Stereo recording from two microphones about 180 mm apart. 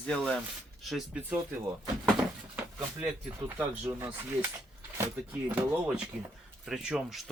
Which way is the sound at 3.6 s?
10° right (ahead or behind).